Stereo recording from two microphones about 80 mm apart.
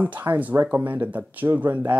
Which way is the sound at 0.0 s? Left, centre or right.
Right.